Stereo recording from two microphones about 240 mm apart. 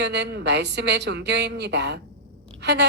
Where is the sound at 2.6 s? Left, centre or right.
Right.